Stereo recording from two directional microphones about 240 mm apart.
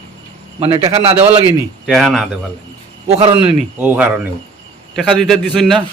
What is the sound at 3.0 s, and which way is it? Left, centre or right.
Speech, right.